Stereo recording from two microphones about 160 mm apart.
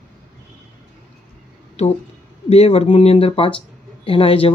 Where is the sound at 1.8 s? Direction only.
40° left (ahead or behind).